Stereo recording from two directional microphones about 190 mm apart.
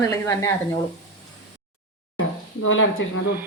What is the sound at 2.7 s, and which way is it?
Speech, 90° left.